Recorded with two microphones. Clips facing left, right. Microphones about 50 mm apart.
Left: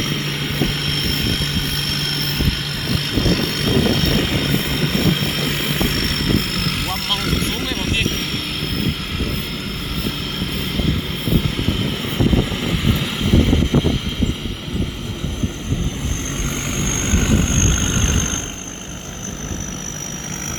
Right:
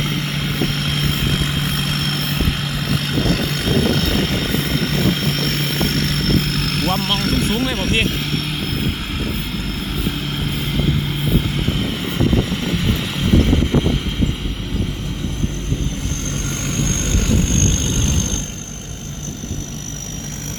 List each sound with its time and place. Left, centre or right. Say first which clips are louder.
0.0 s vehicle: right 1 dB; centre
12.8 s vehicle: even; centre
16.6 s vehicle: right 2 dB; left